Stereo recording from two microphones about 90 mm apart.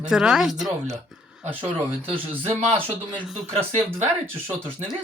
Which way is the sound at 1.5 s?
20° right (ahead or behind).